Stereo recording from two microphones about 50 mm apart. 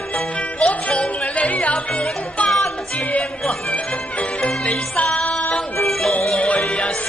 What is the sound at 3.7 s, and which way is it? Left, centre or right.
Music, left.